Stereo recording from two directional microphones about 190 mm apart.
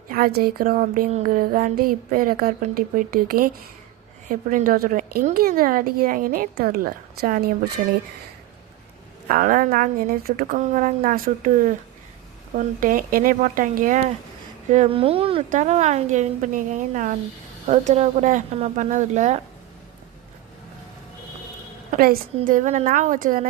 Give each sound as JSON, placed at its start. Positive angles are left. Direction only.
{"t": 0.1, "sound": "speech", "side_deg": -50}
{"t": 9.2, "sound": "speech", "side_deg": -45}
{"t": 14.7, "sound": "a woman's voice", "side_deg": -35}
{"t": 21.9, "sound": "a woman's voice", "side_deg": -50}